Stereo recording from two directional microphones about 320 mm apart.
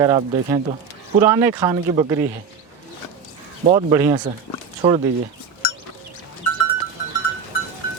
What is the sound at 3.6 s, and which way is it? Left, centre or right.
Speech, centre.